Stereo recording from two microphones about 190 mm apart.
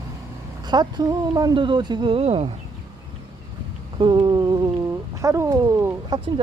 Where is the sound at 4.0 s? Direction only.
25° right (ahead or behind).